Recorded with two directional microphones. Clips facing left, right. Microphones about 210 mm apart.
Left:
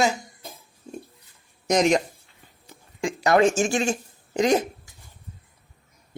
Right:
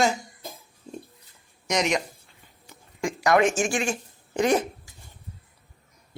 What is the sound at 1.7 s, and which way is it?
Speech, 40° left (ahead or behind).